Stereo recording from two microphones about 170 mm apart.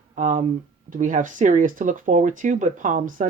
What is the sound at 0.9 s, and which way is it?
Speech, 50° right (ahead or behind).